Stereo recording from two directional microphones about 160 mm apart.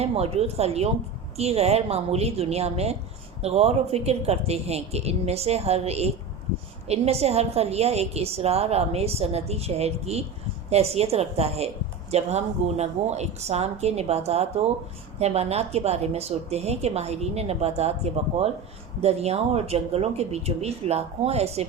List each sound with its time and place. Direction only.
0.0 s a woman's voice: 40° right (ahead or behind)